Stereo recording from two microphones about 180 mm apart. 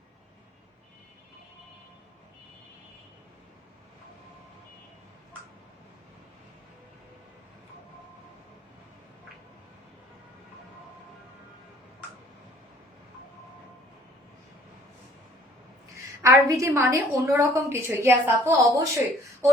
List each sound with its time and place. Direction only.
16.2 s a woman's voice: 15° right (ahead or behind)